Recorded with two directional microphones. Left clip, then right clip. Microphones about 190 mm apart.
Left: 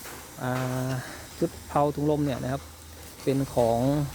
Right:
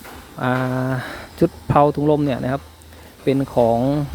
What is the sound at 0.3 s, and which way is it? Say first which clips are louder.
Speech: right 10 dB; 15° right (ahead or behind).